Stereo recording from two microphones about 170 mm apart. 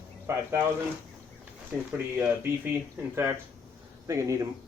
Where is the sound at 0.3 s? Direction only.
15° right (ahead or behind).